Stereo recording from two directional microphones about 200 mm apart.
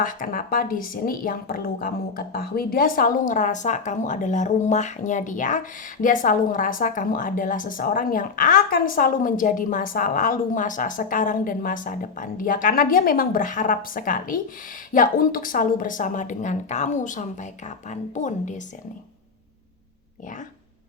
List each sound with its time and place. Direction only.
0.0 s a woman's voice: 45° left (ahead or behind)